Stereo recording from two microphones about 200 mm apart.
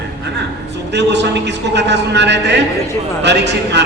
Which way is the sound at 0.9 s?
60° right (ahead or behind).